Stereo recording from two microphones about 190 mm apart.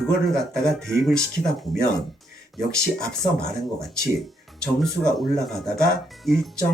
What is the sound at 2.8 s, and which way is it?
Speech, 5° left (ahead or behind).